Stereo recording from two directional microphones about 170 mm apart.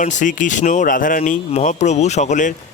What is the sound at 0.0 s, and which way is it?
Speech, 50° left (ahead or behind).